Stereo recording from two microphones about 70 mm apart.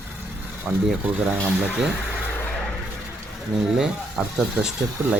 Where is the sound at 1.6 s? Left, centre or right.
Centre.